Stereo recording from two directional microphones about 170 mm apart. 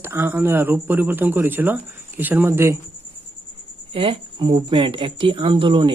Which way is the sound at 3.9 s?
30° right (ahead or behind).